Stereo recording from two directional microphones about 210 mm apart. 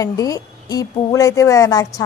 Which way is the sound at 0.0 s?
15° left (ahead or behind).